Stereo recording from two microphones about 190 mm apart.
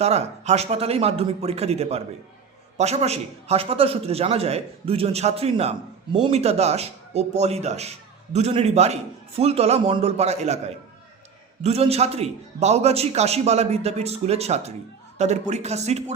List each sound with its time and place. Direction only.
0.0 s a man's voice: 35° right (ahead or behind)